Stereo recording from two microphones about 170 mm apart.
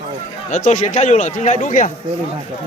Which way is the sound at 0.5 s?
45° left (ahead or behind).